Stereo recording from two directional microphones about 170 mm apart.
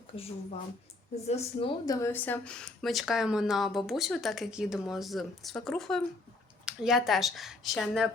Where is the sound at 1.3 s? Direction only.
40° left (ahead or behind).